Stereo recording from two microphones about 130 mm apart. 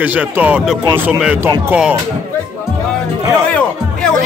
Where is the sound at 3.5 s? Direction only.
10° left (ahead or behind).